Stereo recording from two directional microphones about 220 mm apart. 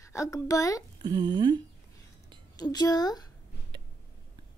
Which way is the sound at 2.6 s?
15° left (ahead or behind).